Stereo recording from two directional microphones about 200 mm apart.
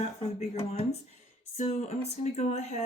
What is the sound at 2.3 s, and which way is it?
Speech, 35° left (ahead or behind).